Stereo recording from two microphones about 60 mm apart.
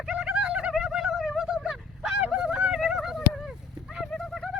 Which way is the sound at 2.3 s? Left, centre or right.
Centre.